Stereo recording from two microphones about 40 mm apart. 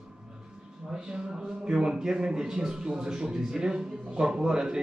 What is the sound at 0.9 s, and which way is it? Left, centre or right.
Speech, right.